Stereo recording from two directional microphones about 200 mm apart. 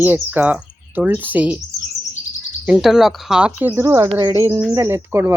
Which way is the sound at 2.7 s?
5° right (ahead or behind).